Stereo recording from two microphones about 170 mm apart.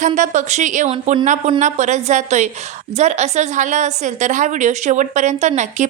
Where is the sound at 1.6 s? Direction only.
45° right (ahead or behind).